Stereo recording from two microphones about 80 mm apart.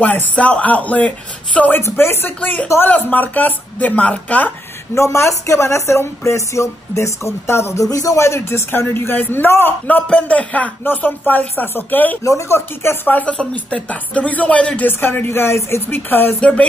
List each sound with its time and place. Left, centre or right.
0.0 s speech: centre
1.8 s speech: left
4.9 s a woman's voice: left
7.8 s speech: left
12.2 s speech: left; by 16.6 s centre